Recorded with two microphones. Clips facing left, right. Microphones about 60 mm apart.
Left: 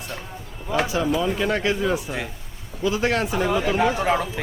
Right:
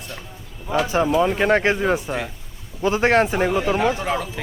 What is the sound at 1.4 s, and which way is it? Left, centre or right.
Speech, right.